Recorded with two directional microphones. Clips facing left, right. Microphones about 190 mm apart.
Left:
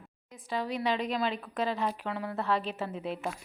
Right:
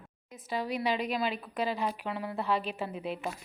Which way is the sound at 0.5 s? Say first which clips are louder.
Even; 10° right (ahead or behind).